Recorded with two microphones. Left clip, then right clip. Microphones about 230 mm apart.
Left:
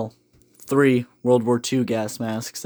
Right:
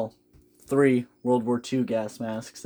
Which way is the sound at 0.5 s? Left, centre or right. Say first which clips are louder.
Left 3 dB; left.